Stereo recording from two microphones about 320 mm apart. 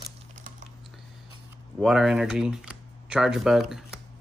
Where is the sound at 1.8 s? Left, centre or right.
Centre.